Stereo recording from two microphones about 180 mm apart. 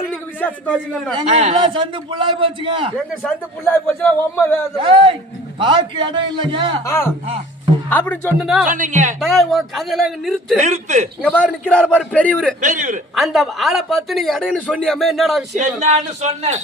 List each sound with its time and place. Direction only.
0.1 s a man's voice: 10° left (ahead or behind)
1.1 s a man's voice: 35° right (ahead or behind)
3.6 s a man's voice: 15° left (ahead or behind)
4.8 s a man's voice: 30° right (ahead or behind)
6.8 s a man's voice: 15° left (ahead or behind)
8.4 s a man's voice: 5° right (ahead or behind)
8.6 s speech: 45° right (ahead or behind)
9.2 s a man's voice: centre (ahead or behind)
10.6 s a man's voice: 40° right (ahead or behind)
11.2 s a man's voice: 5° left (ahead or behind)
12.6 s speech: 45° right (ahead or behind)
13.1 s a man's voice: centre (ahead or behind)
15.5 s a man's voice: 40° right (ahead or behind)